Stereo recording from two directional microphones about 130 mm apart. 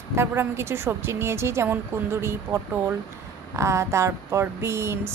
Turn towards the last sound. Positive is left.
turn(degrees=-20)  # may be behind; listen again after turning